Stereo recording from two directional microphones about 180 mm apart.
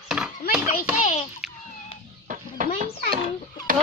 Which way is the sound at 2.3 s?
45° right (ahead or behind).